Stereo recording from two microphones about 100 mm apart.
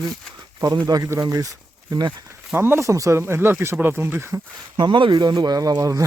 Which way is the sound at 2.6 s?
25° right (ahead or behind).